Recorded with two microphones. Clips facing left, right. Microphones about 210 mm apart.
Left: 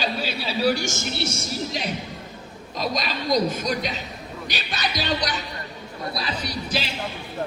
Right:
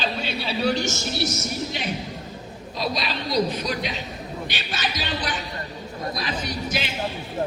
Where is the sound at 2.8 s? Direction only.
45° left (ahead or behind).